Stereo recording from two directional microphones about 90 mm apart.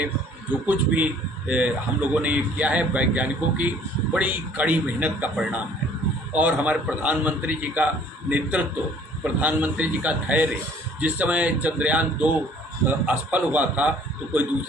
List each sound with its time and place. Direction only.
0.7 s a man's voice: 15° right (ahead or behind)